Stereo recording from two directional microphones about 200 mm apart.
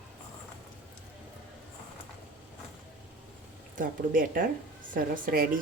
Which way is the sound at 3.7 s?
40° right (ahead or behind).